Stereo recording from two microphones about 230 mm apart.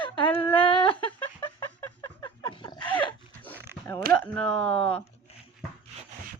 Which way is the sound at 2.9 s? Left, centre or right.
Centre.